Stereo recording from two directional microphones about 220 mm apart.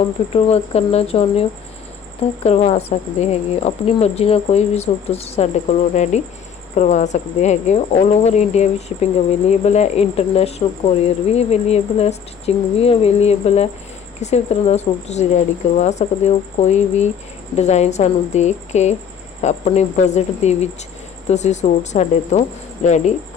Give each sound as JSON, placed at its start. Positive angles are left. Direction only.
{"t": 0.3, "sound": "speech", "side_deg": 30}